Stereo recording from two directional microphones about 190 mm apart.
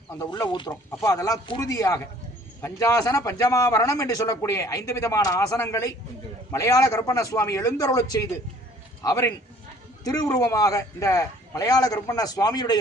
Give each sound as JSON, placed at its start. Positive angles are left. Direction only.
{"t": 0.2, "sound": "a man's voice", "side_deg": 20}